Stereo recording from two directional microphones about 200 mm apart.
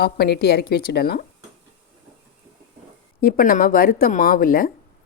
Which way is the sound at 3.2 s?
45° left (ahead or behind).